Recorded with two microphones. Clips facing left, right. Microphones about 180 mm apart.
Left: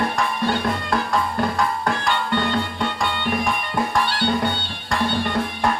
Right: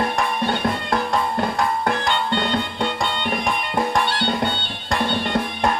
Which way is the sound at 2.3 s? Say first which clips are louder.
Even; 25° right (ahead or behind).